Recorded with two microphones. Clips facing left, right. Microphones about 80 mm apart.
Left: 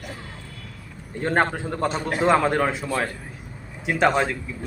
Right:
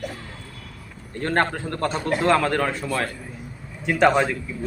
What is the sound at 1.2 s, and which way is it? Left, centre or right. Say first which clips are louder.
Speech: left 1 dB; centre.